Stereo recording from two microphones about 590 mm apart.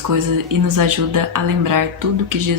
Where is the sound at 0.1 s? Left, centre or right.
Right.